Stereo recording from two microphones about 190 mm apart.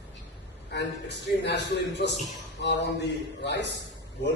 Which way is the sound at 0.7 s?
65° left (ahead or behind).